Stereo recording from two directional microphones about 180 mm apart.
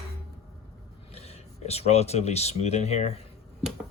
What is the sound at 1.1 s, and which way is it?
Speech, 35° left (ahead or behind).